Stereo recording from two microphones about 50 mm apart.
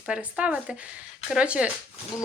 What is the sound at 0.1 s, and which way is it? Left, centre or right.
A child's voice, right.